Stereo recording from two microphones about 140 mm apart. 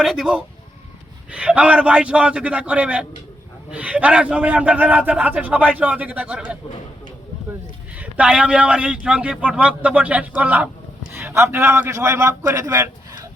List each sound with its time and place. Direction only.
0.0 s a man's voice: centre (ahead or behind)
7.9 s a man's voice: 10° right (ahead or behind)
11.1 s a sound: 15° right (ahead or behind)
11.5 s a man's voice: 15° right (ahead or behind)